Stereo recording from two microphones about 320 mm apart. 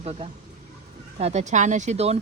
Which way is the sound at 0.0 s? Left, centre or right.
Centre.